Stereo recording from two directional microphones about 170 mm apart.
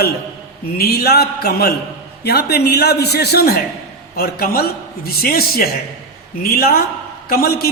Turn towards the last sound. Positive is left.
turn(degrees=65)  # may be behind; listen again after turning